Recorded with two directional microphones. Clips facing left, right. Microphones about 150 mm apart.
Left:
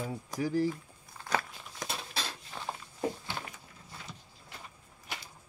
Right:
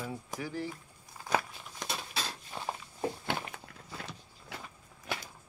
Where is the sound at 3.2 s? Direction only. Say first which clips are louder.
Right 5 dB; 65° right (ahead or behind).